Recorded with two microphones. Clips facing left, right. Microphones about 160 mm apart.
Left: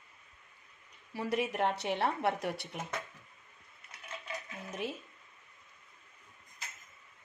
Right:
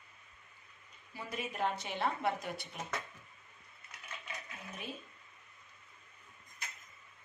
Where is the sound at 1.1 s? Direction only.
75° left (ahead or behind).